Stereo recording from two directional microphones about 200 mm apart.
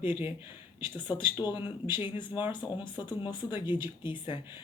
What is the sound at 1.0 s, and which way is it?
Speech, 25° left (ahead or behind).